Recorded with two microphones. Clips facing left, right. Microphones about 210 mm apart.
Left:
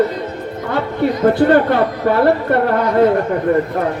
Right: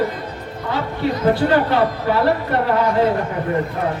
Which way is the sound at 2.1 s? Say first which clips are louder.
Left 4 dB; 55° left (ahead or behind).